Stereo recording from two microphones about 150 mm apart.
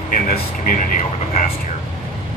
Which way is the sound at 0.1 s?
65° left (ahead or behind).